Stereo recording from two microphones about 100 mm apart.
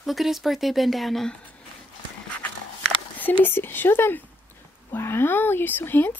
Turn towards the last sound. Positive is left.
turn(degrees=20)  # may be behind; listen again after turning